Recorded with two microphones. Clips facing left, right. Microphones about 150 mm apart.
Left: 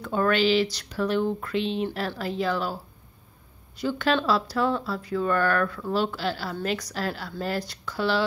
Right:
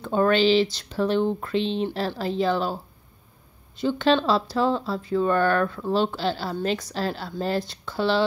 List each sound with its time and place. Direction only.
0.0 s speech: 25° right (ahead or behind)